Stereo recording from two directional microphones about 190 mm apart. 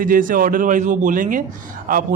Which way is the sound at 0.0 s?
45° right (ahead or behind).